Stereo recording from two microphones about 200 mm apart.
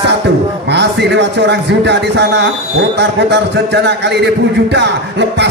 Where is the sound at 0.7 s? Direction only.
60° right (ahead or behind).